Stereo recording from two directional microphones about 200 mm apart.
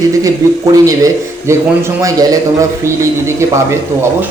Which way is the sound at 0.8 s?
15° right (ahead or behind).